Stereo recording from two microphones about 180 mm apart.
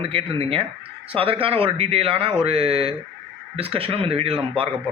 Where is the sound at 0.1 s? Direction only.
30° right (ahead or behind).